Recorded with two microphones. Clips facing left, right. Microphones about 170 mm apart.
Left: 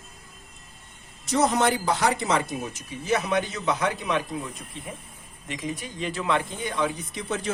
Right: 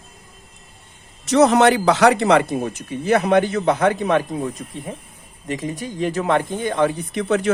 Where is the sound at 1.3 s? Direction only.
75° right (ahead or behind); by 4.5 s 50° right (ahead or behind).